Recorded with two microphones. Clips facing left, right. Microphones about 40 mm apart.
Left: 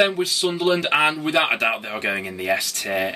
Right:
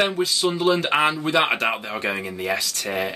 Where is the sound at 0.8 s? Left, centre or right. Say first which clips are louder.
Left 1 dB; centre.